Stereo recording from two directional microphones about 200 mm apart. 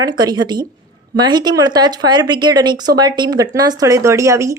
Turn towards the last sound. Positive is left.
turn(degrees=-15)  # may be behind; listen again after turning